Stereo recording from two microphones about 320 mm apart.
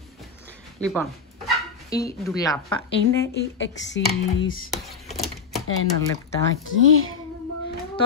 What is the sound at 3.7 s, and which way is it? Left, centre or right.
Speech, left.